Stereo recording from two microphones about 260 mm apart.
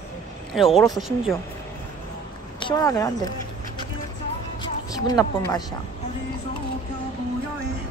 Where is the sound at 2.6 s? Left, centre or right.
Centre.